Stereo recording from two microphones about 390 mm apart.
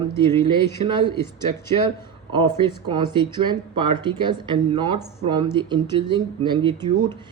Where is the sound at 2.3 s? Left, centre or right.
Centre.